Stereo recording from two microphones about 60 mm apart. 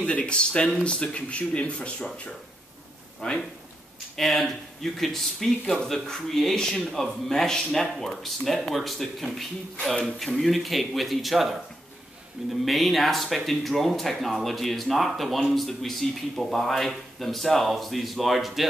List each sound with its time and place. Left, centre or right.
0.0 s speech: centre
3.2 s speech: centre
4.2 s speech: centre
12.6 s speech: centre